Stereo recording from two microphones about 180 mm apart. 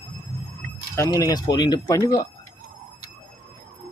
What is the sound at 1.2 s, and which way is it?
Speech, 25° left (ahead or behind).